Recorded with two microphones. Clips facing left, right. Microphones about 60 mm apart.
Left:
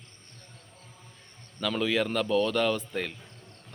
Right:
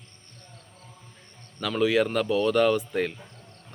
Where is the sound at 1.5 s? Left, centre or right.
Centre.